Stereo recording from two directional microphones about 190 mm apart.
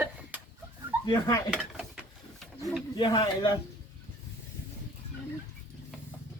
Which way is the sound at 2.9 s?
20° left (ahead or behind).